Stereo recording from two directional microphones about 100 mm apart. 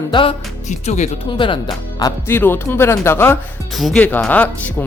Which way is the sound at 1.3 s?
55° left (ahead or behind).